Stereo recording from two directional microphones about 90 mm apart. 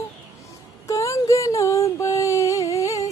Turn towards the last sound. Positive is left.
turn(degrees=35)  # may be behind; listen again after turning